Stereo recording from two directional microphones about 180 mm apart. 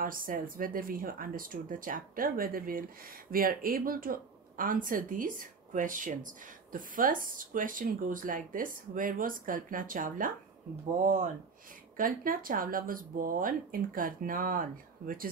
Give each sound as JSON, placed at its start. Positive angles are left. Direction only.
{"t": 0.0, "sound": "speech", "side_deg": -50}